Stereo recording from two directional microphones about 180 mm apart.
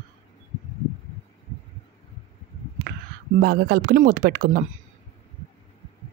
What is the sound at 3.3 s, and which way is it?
Speech, 55° right (ahead or behind).